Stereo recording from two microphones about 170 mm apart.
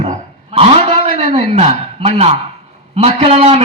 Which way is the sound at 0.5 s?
35° right (ahead or behind).